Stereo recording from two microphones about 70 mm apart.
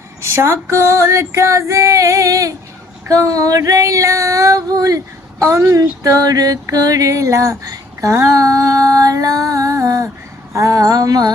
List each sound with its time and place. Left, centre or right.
0.2 s female singing: right
5.4 s a woman's voice: right
5.7 s music: right
10.5 s female singing: right